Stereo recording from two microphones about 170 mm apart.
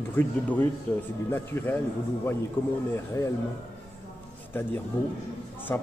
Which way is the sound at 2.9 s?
20° left (ahead or behind).